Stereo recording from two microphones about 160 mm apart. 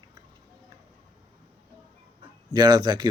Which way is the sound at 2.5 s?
25° right (ahead or behind).